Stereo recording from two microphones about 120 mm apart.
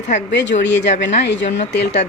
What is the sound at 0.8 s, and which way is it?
Speech, 85° left.